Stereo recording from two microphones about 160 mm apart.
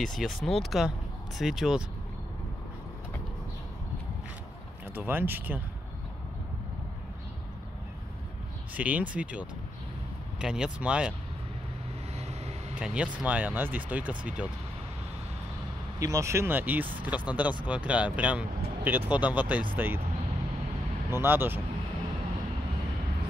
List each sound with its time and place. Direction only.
0.0 s speech: centre (ahead or behind)
4.9 s speech: 15° right (ahead or behind)
8.7 s speech: 10° right (ahead or behind)
12.2 s vehicle: 45° right (ahead or behind)
12.7 s speech: 5° right (ahead or behind)
16.0 s speech: 20° right (ahead or behind)
21.1 s speech: 15° right (ahead or behind)